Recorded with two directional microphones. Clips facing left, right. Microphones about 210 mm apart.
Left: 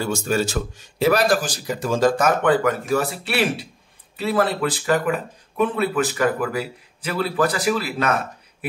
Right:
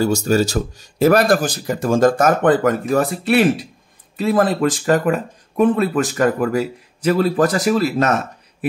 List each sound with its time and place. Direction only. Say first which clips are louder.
0.0 s speech: right 6 dB; 40° right (ahead or behind)
4.6 s speech: right 4 dB; 35° right (ahead or behind)